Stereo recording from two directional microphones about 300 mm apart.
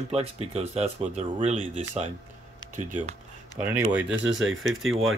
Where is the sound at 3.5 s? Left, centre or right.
Centre.